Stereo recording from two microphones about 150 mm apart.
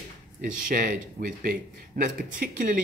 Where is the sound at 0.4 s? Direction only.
65° right (ahead or behind).